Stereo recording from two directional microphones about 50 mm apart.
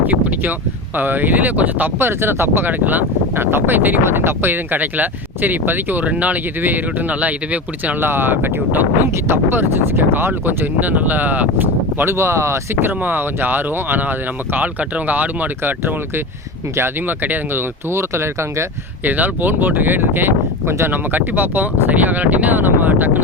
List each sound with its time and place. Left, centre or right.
0.0 s a sound: right
0.9 s speech: right
2.0 s speech: right
2.6 s speech: right
8.0 s speech: right
12.1 s speech: right
12.9 s speech: right
17.9 s speech: right
19.0 s speech: right